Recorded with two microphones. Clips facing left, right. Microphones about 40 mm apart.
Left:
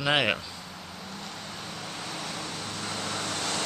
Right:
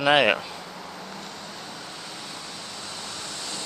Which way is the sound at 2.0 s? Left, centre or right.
Left.